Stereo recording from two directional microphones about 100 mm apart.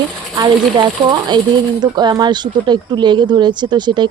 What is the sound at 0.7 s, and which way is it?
Speech, 50° right (ahead or behind).